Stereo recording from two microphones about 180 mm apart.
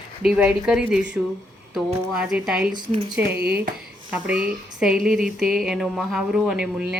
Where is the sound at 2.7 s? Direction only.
35° right (ahead or behind).